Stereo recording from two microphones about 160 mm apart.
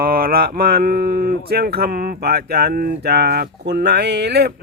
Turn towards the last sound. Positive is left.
turn(degrees=-90)